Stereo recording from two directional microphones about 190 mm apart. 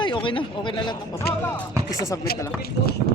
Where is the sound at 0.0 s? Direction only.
25° left (ahead or behind).